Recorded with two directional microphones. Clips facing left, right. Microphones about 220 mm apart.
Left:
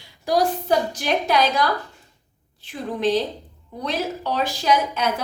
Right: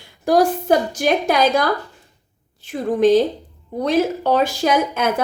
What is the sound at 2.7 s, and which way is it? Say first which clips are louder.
A woman's voice: right 8 dB; 50° right (ahead or behind).